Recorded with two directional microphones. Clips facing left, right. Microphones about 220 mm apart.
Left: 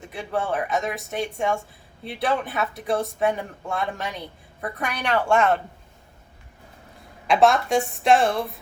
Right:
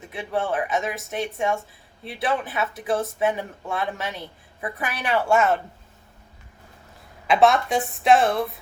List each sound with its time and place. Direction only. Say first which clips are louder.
0.0 s speech: right 1 dB; centre (ahead or behind)
7.3 s speech: even; centre (ahead or behind)